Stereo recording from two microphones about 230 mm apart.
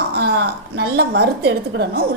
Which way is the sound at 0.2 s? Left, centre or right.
Right.